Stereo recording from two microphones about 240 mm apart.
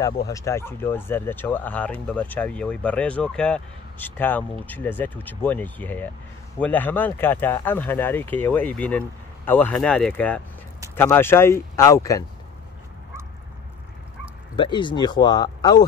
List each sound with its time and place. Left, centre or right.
0.0 s speech: centre
14.6 s speech: centre